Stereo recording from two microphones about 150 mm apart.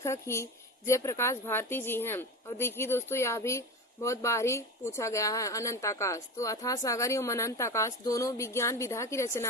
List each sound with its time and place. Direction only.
0.0 s a woman's voice: 20° left (ahead or behind)